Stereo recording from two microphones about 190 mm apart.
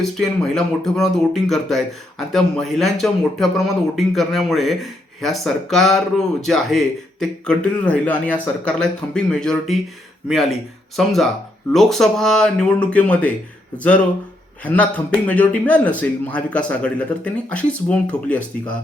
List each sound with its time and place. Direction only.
0.0 s speech: centre (ahead or behind)
10.9 s a man's voice: centre (ahead or behind)